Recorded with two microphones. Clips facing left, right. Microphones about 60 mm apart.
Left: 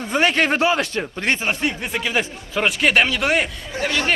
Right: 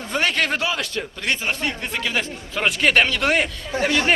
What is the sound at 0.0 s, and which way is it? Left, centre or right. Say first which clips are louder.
Speech: left 3 dB; centre.